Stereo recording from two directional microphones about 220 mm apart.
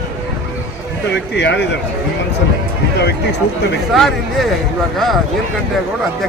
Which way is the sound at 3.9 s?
Centre (ahead or behind).